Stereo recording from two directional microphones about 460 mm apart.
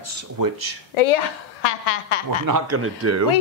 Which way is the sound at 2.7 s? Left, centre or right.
Right.